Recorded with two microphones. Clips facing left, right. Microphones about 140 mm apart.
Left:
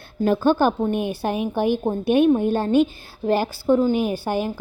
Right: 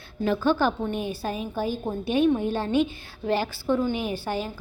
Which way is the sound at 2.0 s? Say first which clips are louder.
Left 5 dB; 55° left (ahead or behind).